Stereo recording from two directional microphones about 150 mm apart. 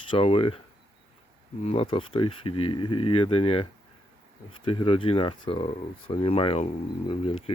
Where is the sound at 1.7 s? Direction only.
40° left (ahead or behind).